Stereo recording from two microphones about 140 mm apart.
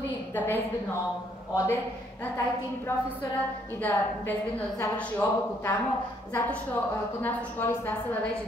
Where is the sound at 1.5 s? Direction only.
25° left (ahead or behind).